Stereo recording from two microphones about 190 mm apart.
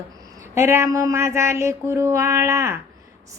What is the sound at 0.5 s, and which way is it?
A woman's voice, 15° right (ahead or behind).